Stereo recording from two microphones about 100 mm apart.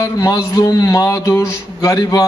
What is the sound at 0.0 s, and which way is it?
Speech, 35° left (ahead or behind).